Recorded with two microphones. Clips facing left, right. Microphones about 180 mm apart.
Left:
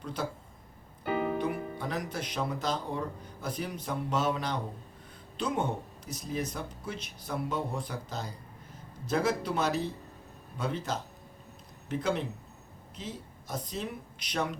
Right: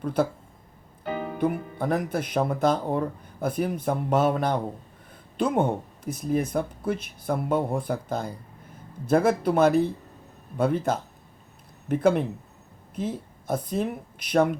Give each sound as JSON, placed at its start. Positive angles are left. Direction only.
{"t": 0.0, "sound": "speech", "side_deg": -55}
{"t": 1.4, "sound": "speech", "side_deg": -50}